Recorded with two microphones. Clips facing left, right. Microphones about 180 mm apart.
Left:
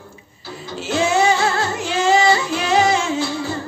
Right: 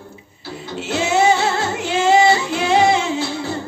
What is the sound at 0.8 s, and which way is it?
Female singing, 25° right (ahead or behind).